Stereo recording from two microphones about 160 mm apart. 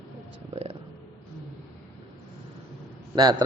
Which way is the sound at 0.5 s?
40° right (ahead or behind).